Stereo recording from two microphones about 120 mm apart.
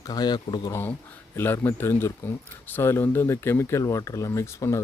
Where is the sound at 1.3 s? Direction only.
20° left (ahead or behind).